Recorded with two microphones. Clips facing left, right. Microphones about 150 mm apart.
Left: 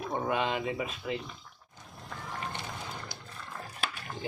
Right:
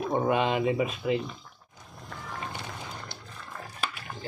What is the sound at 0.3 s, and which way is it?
Speech, 20° right (ahead or behind).